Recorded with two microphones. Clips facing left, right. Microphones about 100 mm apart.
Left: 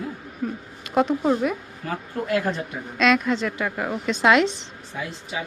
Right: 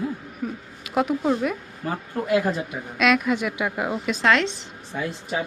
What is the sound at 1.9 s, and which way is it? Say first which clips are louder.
A woman's voice: right 2 dB; 15° right (ahead or behind).